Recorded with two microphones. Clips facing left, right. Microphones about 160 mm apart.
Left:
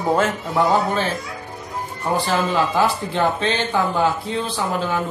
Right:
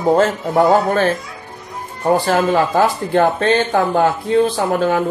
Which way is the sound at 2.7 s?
50° right (ahead or behind).